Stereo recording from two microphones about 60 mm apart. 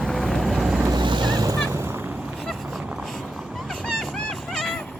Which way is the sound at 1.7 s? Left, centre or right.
Right.